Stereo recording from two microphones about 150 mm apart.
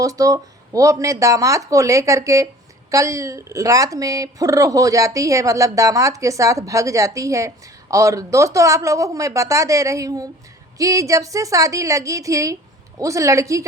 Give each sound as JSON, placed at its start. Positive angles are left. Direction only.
{"t": 0.0, "sound": "a woman's voice", "side_deg": -25}